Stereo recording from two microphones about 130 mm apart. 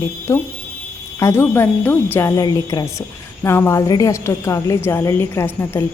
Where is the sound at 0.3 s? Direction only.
25° left (ahead or behind).